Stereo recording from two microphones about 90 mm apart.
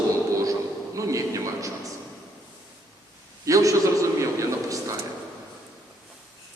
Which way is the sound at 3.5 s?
40° right (ahead or behind).